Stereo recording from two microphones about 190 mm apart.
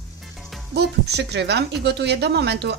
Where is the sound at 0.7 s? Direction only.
60° right (ahead or behind).